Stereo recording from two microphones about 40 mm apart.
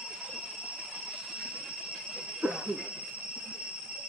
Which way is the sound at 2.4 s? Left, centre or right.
Right.